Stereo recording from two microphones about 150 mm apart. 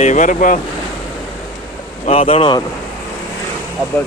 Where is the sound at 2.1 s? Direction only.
40° left (ahead or behind).